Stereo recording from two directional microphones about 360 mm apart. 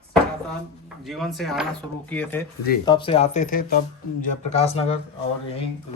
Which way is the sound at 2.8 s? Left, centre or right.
Centre.